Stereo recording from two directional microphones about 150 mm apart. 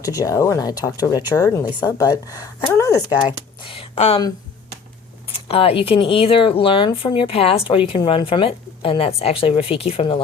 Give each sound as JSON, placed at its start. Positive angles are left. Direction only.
{"t": 0.0, "sound": "speech", "side_deg": 25}
{"t": 3.6, "sound": "speech", "side_deg": 40}
{"t": 5.3, "sound": "speech", "side_deg": 40}